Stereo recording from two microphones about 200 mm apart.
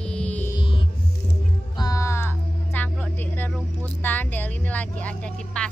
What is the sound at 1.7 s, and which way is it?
Music, 20° left (ahead or behind).